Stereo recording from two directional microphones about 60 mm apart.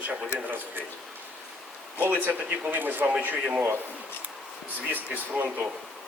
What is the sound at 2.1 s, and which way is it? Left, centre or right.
Speech, right.